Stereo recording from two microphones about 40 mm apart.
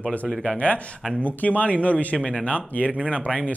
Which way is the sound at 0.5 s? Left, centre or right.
Left.